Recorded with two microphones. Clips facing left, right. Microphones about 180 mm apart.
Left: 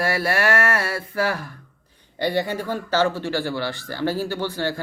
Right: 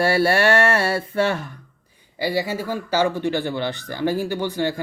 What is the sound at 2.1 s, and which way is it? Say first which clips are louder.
Speech: even; 5° right (ahead or behind).